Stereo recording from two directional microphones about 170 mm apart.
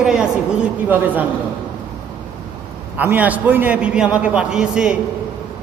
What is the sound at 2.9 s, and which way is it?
A man's voice, 10° right (ahead or behind).